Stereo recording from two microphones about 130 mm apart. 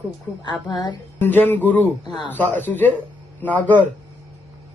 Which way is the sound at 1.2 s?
15° left (ahead or behind).